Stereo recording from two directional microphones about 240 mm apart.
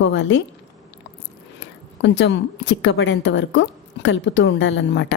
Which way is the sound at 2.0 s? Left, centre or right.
Left.